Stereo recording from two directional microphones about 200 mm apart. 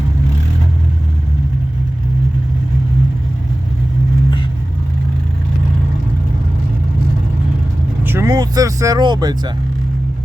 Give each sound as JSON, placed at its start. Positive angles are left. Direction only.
{"t": 8.0, "sound": "vehicle", "side_deg": -15}